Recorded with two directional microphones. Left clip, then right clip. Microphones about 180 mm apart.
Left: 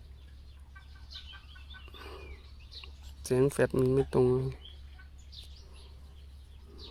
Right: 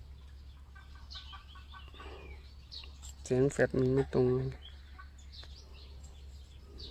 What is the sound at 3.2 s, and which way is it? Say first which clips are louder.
Speech: left 2 dB; 5° left (ahead or behind).